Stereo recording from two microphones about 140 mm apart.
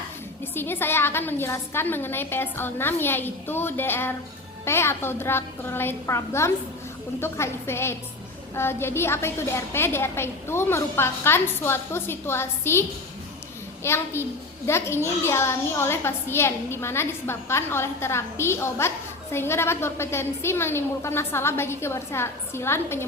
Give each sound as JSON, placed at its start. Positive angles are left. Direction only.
{"t": 0.5, "sound": "a woman's voice", "side_deg": 15}
{"t": 13.8, "sound": "a woman's voice", "side_deg": 15}